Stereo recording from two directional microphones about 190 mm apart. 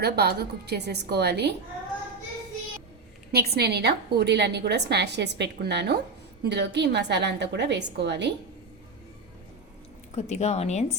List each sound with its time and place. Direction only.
0.0 s a woman's voice: 60° right (ahead or behind)
3.3 s a woman's voice: 55° right (ahead or behind)
10.2 s a woman's voice: 35° left (ahead or behind)